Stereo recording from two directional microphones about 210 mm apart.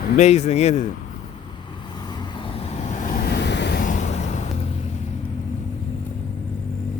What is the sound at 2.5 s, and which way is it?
Vehicle, 30° left (ahead or behind).